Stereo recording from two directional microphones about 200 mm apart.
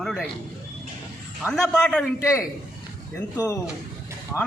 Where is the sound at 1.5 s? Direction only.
5° left (ahead or behind).